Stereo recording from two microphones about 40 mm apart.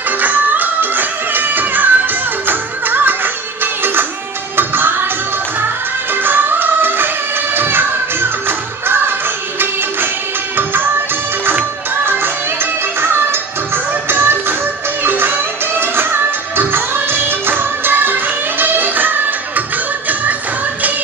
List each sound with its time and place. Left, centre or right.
0.2 s music: right
6.1 s music: right
10.5 s music: right
12.0 s music: right